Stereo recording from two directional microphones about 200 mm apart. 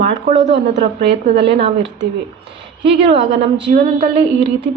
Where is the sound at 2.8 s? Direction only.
30° right (ahead or behind).